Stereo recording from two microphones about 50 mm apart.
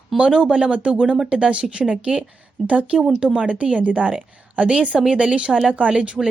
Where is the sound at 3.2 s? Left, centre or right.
Centre.